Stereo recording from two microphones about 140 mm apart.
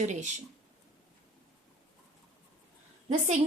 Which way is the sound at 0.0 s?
55° right (ahead or behind).